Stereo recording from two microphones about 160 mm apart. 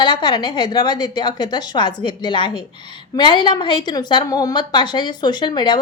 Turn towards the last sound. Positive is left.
turn(degrees=30)  # may be behind; listen again after turning